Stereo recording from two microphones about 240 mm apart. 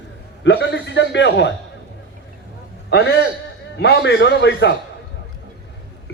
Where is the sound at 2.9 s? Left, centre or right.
Left.